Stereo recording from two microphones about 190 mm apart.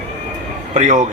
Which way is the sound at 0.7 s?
40° right (ahead or behind).